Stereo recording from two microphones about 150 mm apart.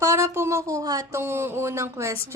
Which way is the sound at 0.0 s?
20° right (ahead or behind).